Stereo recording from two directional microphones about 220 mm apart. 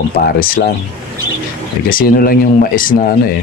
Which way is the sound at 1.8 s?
40° left (ahead or behind).